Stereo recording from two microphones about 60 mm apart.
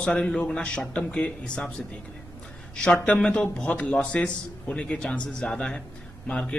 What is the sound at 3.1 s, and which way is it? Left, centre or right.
A man's voice, centre.